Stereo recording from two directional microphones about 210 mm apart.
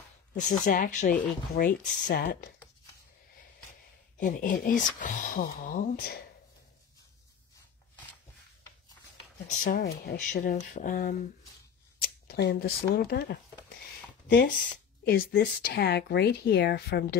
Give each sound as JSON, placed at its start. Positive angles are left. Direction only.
{"t": 0.5, "sound": "speech", "side_deg": 40}
{"t": 4.2, "sound": "speech", "side_deg": 40}
{"t": 9.6, "sound": "speech", "side_deg": 45}
{"t": 12.3, "sound": "speech", "side_deg": 50}